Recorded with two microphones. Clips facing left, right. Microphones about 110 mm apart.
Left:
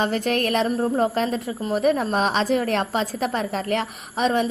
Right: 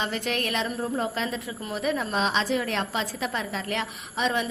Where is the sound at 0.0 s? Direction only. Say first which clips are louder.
Left 7 dB; 45° left (ahead or behind).